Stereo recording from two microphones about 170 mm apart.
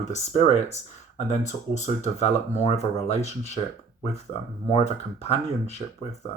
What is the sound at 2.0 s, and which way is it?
Speech, 40° left (ahead or behind).